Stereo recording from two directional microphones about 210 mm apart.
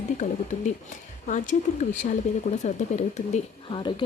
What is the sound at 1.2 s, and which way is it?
A woman's voice, 35° left (ahead or behind).